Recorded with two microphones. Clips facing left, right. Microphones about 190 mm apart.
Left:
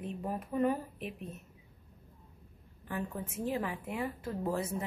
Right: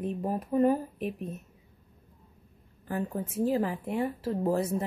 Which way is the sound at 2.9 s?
35° right (ahead or behind).